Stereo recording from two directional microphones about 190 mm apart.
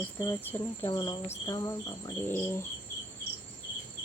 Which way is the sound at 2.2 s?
10° left (ahead or behind).